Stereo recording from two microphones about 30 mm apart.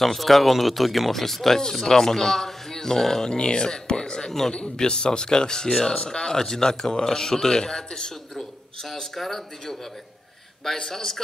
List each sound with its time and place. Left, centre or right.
0.0 s speech: centre
1.1 s speech: centre
3.3 s speech: left
9.1 s speech: centre
10.8 s speech: centre